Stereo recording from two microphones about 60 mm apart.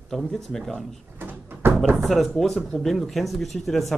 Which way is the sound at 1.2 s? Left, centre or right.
Right.